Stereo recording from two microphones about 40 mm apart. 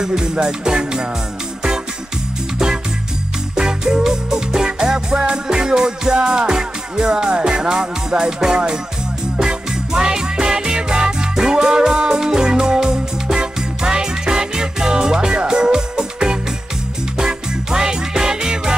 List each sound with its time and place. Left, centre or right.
0.0 s music: centre
3.5 s music: centre